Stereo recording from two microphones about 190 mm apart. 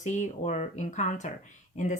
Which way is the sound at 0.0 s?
40° left (ahead or behind).